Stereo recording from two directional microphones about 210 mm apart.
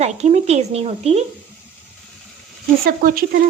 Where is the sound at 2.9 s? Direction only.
45° right (ahead or behind).